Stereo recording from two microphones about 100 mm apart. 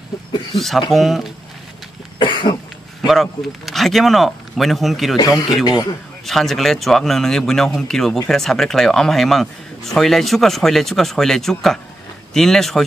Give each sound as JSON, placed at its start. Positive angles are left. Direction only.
{"t": 0.6, "sound": "speech", "side_deg": 0}
{"t": 2.1, "sound": "cough", "side_deg": 55}
{"t": 3.1, "sound": "speech", "side_deg": 0}
{"t": 5.1, "sound": "speech", "side_deg": 40}
{"t": 6.2, "sound": "speech", "side_deg": 0}